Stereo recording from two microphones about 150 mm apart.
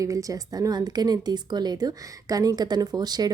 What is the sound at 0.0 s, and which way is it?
Speech, 20° right (ahead or behind).